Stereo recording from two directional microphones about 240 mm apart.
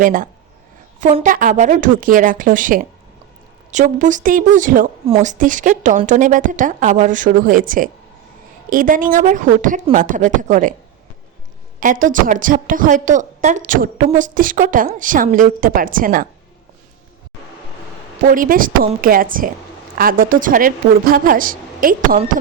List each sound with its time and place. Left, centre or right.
0.0 s a woman's voice: right
11.8 s a woman's voice: right
18.3 s a woman's voice: right